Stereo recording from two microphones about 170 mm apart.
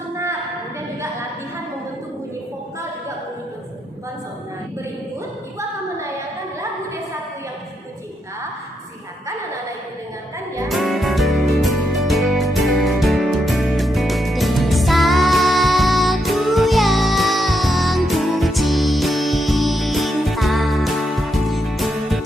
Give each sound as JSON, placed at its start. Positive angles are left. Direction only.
{"t": 10.7, "sound": "music", "side_deg": 0}